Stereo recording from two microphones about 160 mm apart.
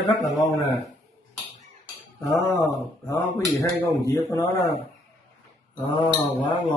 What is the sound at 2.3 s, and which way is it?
Speech, 20° left (ahead or behind).